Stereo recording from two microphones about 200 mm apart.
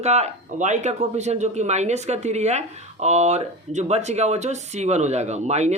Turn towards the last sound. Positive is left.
turn(degrees=-35)  # may be behind; listen again after turning